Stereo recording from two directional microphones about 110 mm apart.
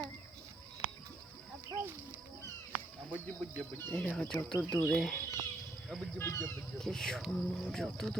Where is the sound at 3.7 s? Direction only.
20° left (ahead or behind).